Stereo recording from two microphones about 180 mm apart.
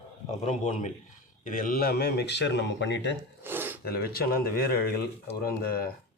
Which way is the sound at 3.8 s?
60° left (ahead or behind).